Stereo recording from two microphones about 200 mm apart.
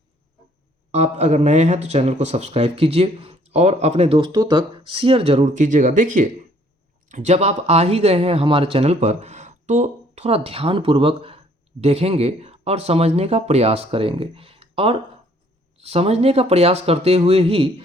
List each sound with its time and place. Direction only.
0.9 s speech: 35° right (ahead or behind)